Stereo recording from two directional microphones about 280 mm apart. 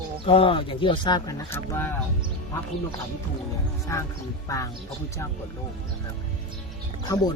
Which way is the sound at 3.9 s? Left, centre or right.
Centre.